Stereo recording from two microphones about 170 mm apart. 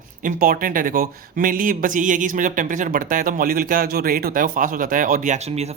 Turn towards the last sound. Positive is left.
turn(degrees=-40)  # may be behind; listen again after turning